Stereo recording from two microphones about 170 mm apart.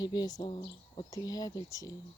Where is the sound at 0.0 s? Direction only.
25° left (ahead or behind).